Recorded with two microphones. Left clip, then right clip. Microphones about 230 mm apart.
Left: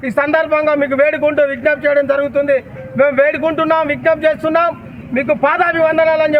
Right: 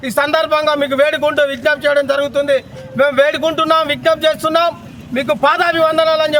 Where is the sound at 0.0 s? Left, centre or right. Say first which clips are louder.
Even; centre.